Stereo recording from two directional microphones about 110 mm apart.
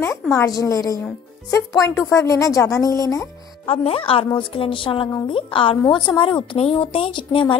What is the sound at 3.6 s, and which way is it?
A woman's voice, 60° left (ahead or behind).